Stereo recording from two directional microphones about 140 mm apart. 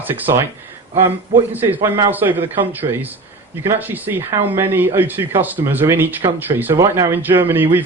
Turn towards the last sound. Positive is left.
turn(degrees=-15)  # may be behind; listen again after turning